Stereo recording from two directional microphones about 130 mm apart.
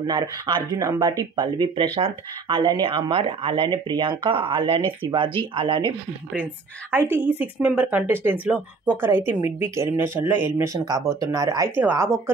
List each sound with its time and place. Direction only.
0.0 s speech: 35° right (ahead or behind)
6.9 s speech: 15° right (ahead or behind)
11.7 s speech: 15° right (ahead or behind)